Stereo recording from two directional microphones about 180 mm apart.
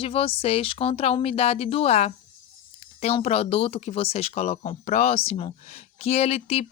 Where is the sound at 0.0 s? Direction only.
30° left (ahead or behind).